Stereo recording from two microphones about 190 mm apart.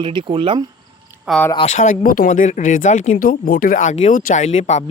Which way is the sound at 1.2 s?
5° left (ahead or behind).